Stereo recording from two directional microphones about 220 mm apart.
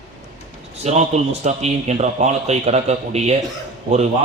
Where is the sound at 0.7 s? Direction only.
30° right (ahead or behind).